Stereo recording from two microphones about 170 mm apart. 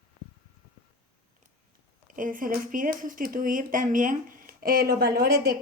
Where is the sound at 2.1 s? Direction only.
50° right (ahead or behind).